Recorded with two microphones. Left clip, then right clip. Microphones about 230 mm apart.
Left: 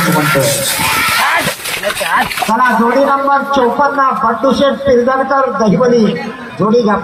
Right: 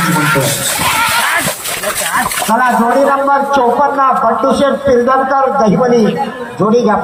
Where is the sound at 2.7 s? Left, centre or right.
Centre.